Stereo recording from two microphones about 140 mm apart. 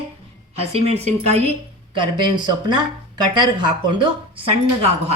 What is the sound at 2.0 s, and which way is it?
Speech, 35° right (ahead or behind).